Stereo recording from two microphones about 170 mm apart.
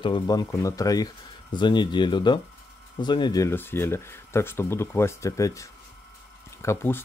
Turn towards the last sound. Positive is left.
turn(degrees=15)  # may be behind; listen again after turning